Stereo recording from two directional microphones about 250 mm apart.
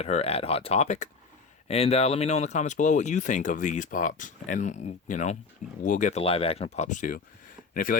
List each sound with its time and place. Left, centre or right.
0.0 s speech: left